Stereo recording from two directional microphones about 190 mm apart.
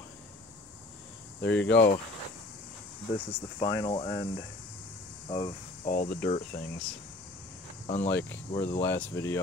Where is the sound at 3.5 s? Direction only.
20° left (ahead or behind).